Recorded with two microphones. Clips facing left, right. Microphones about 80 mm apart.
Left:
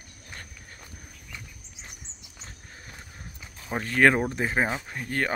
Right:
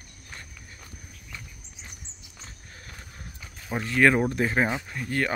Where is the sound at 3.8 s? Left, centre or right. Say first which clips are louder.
Even; left.